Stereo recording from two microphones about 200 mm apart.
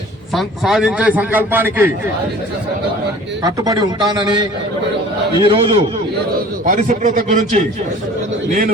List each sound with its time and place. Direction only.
0.3 s a man's voice: centre (ahead or behind)
3.4 s a man's voice: 20° right (ahead or behind)
6.7 s a man's voice: 40° right (ahead or behind)